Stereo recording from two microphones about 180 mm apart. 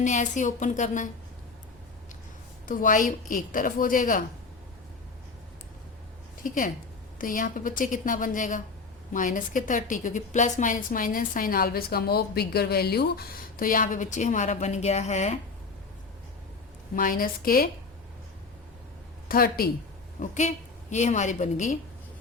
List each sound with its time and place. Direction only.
0.0 s a woman's voice: 45° left (ahead or behind)
2.6 s a woman's voice: 50° left (ahead or behind)
6.4 s a woman's voice: 50° left (ahead or behind)
16.9 s a woman's voice: 50° left (ahead or behind)
19.3 s a woman's voice: 55° left (ahead or behind)
20.2 s a woman's voice: 45° left (ahead or behind)